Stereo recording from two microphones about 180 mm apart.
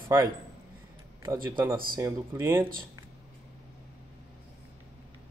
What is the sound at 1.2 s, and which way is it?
A man's voice, 20° right (ahead or behind).